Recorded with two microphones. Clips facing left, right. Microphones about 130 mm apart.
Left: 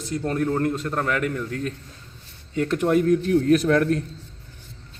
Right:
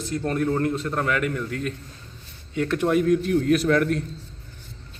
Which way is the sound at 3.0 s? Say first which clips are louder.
Left 1 dB; 40° left (ahead or behind).